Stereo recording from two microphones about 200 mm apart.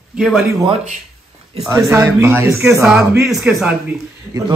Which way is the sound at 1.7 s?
10° right (ahead or behind).